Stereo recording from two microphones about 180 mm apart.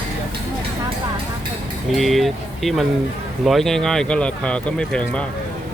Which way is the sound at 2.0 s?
Centre (ahead or behind).